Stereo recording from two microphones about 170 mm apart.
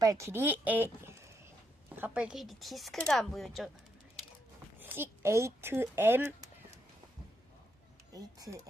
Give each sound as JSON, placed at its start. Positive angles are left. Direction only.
{"t": 0.0, "sound": "speech", "side_deg": -20}
{"t": 4.8, "sound": "speech", "side_deg": -10}
{"t": 8.1, "sound": "speech", "side_deg": -20}